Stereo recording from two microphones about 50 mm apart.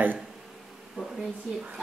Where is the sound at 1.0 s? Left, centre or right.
Centre.